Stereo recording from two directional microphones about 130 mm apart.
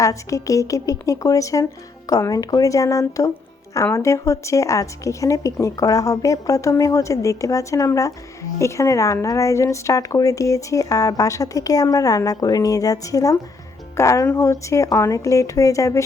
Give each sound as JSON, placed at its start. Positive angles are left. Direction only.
{"t": 0.0, "sound": "speech", "side_deg": 25}